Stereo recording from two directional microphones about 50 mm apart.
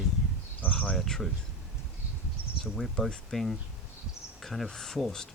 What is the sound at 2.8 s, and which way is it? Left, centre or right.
Speech, centre.